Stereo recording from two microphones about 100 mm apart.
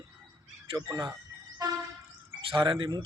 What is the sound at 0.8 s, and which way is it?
Speech, 45° right (ahead or behind).